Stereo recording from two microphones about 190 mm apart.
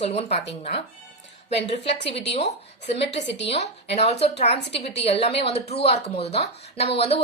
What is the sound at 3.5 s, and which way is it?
A woman's voice, 35° left (ahead or behind).